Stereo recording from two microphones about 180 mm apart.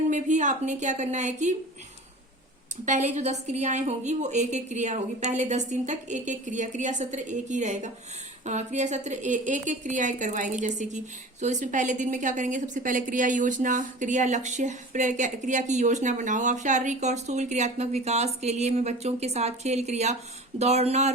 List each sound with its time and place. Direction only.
0.1 s a woman's voice: 45° right (ahead or behind)
2.8 s a woman's voice: 40° right (ahead or behind)